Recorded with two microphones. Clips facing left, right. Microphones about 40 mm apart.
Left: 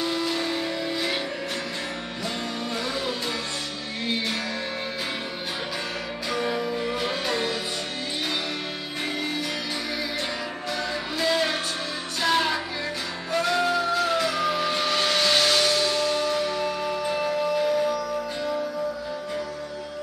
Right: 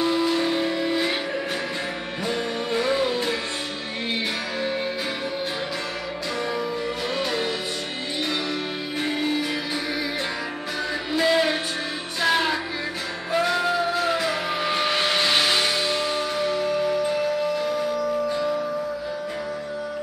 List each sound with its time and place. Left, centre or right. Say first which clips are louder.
0.0 s music: right 5 dB; centre
2.8 s music: right 10 dB; right
6.3 s music: left 1 dB; centre
9.0 s music: right 4 dB; centre
11.1 s music: right 4 dB; centre
17.1 s music: right 1 dB; centre